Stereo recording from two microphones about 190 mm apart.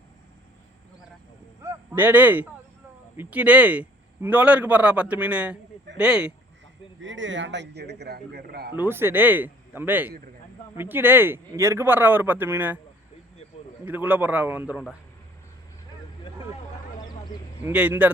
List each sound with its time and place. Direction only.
1.6 s a man's voice: 10° right (ahead or behind)
7.0 s speech: 80° right; by 8.7 s 55° right (ahead or behind)
8.7 s a man's voice: 10° right (ahead or behind)
13.8 s a man's voice: 10° right (ahead or behind)
17.0 s a sound: 20° left (ahead or behind)
17.7 s a man's voice: 10° right (ahead or behind)